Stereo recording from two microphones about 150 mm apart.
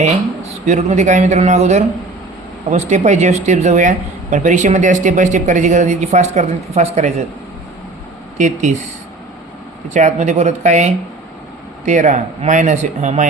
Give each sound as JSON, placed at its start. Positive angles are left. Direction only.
{"t": 0.0, "sound": "speech", "side_deg": -50}
{"t": 8.4, "sound": "speech", "side_deg": -55}
{"t": 9.9, "sound": "speech", "side_deg": -55}